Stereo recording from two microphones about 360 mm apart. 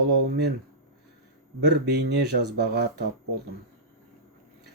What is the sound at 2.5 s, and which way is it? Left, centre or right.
Speech, right.